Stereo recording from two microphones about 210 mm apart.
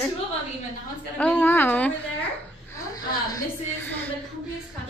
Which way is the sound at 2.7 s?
15° left (ahead or behind).